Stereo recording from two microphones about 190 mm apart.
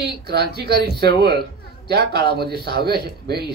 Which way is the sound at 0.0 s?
55° right (ahead or behind).